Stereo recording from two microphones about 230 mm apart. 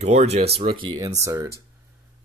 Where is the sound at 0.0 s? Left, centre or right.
Right.